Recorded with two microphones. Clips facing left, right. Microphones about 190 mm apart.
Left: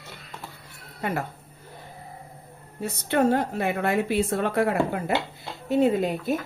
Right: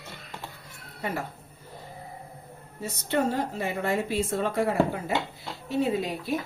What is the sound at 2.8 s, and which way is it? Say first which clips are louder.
Speech: left 4 dB; 60° left (ahead or behind).